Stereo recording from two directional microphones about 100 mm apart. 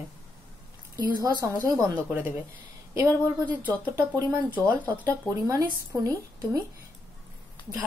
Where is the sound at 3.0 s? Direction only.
20° left (ahead or behind).